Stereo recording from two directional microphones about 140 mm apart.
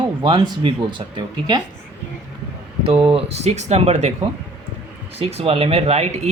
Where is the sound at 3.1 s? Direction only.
50° right (ahead or behind).